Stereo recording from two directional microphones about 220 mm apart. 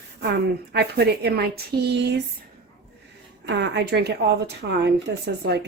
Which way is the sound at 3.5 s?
50° right (ahead or behind).